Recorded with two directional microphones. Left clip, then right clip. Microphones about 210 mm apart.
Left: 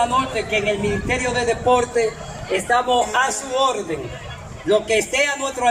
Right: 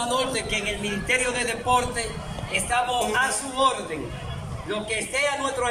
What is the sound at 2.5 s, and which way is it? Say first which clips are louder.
A man's voice: left 6 dB; 40° left (ahead or behind).